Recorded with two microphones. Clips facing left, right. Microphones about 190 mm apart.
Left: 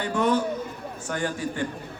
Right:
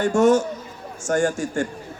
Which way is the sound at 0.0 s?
45° right (ahead or behind).